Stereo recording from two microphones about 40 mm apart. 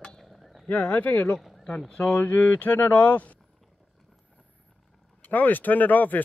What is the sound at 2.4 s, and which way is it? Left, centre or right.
Speech, left.